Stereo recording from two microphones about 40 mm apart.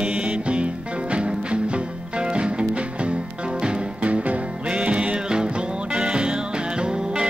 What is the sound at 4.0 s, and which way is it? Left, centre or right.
Music, right.